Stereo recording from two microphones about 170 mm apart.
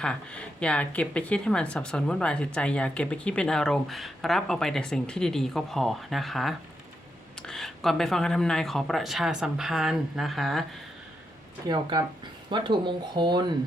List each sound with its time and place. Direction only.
0.0 s a woman's voice: 5° left (ahead or behind)
11.7 s speech: 25° right (ahead or behind)